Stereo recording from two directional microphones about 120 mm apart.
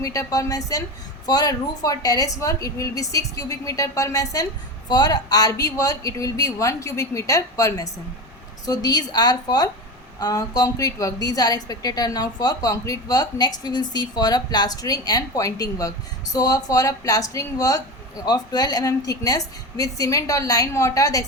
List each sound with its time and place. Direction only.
0.0 s a woman's voice: 30° left (ahead or behind)